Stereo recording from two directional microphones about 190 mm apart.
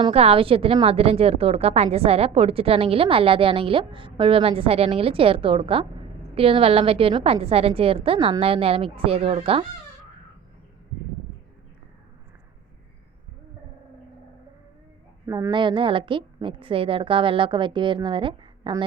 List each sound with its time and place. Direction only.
0.0 s a woman's voice: 30° right (ahead or behind)
15.3 s a woman's voice: 20° right (ahead or behind)